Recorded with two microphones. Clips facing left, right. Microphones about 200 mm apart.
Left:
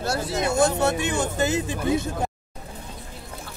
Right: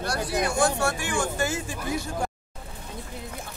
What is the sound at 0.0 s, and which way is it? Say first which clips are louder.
Speech: left 2 dB; 25° left (ahead or behind).